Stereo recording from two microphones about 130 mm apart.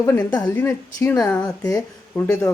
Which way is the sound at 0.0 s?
25° left (ahead or behind).